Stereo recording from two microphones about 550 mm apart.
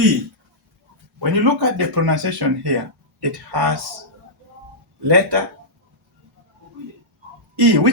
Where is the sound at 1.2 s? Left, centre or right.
Right.